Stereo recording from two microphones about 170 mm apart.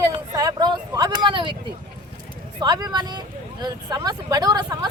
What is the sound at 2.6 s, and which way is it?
Speech, 25° right (ahead or behind).